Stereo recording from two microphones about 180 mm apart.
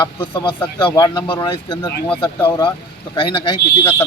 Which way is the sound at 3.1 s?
25° left (ahead or behind).